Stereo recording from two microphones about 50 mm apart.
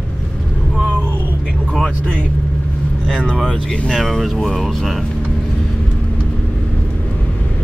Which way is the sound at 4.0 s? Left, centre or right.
Centre.